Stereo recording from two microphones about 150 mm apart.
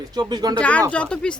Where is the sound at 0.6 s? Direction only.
10° left (ahead or behind).